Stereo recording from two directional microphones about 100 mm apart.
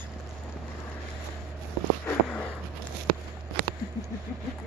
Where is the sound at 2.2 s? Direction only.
10° left (ahead or behind).